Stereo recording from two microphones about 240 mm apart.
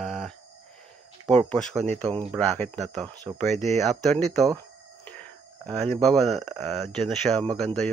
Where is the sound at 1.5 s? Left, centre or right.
Centre.